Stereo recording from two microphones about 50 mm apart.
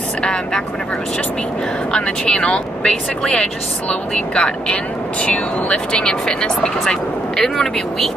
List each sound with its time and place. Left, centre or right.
0.2 s speech: centre
1.9 s speech: centre